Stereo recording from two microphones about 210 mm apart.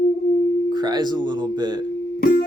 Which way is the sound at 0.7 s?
20° right (ahead or behind).